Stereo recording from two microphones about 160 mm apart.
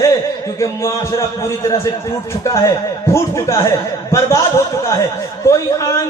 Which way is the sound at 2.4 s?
20° left (ahead or behind).